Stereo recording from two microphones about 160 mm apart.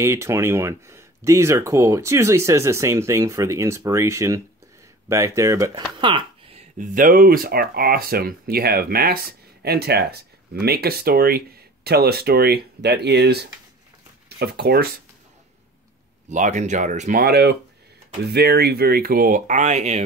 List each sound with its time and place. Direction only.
0.0 s speech: 15° right (ahead or behind)
5.9 s a sound: 30° right (ahead or behind)
6.8 s speech: 55° right (ahead or behind); by 14.9 s 80° right
16.3 s speech: 50° right (ahead or behind)
17.2 s speech: 80° right; by 20.0 s 45° right (ahead or behind)